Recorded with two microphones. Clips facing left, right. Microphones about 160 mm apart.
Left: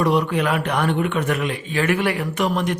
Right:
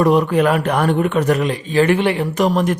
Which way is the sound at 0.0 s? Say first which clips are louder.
Right 5 dB; 45° right (ahead or behind).